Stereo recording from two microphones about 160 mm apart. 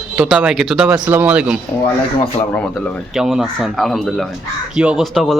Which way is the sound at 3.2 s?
5° right (ahead or behind).